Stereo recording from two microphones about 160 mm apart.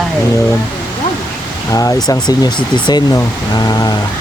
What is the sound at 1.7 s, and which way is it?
Speech, 20° left (ahead or behind).